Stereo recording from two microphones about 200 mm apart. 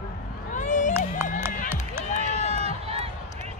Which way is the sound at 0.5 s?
40° left (ahead or behind).